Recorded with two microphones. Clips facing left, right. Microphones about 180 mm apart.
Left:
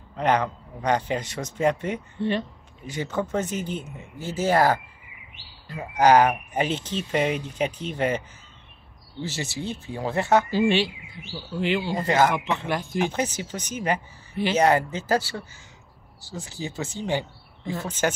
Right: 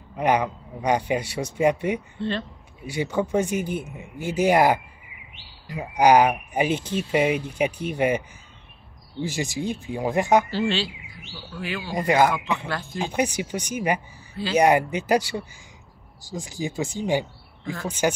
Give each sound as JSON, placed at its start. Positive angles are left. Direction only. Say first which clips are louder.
{"t": 0.1, "sound": "speech", "louder": "right 1 dB", "side_deg": -10}
{"t": 2.1, "sound": "speech", "louder": "left 2 dB", "side_deg": 15}
{"t": 2.8, "sound": "speech", "louder": "right 3 dB", "side_deg": -10}
{"t": 9.2, "sound": "speech", "louder": "right 4 dB", "side_deg": -15}
{"t": 10.5, "sound": "speech", "louder": "left 3 dB", "side_deg": 15}
{"t": 11.9, "sound": "speech", "louder": "right 4 dB", "side_deg": -15}
{"t": 12.6, "sound": "speech", "louder": "left 4 dB", "side_deg": 20}
{"t": 13.0, "sound": "speech", "louder": "right 1 dB", "side_deg": -15}